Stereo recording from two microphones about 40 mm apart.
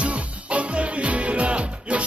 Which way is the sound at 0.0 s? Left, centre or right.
Right.